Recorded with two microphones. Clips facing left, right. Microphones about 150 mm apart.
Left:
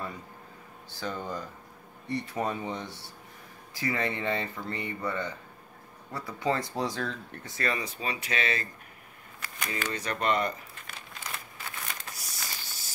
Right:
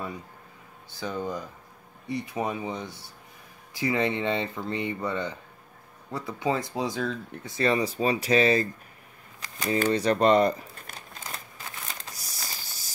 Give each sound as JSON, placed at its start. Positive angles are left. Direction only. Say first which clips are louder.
{"t": 0.9, "sound": "speech", "louder": "right 3 dB", "side_deg": -15}
{"t": 7.6, "sound": "speech", "louder": "right 8 dB", "side_deg": -35}
{"t": 12.2, "sound": "a sound", "louder": "right 1 dB", "side_deg": -35}